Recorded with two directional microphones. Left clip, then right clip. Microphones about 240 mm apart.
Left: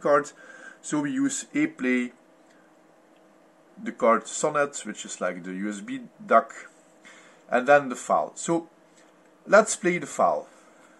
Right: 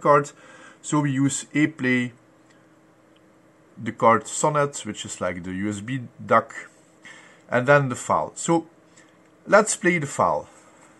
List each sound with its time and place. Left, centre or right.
0.0 s speech: centre
3.8 s speech: centre